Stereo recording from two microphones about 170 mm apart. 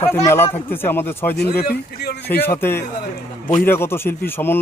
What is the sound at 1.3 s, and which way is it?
Speech, 70° left (ahead or behind).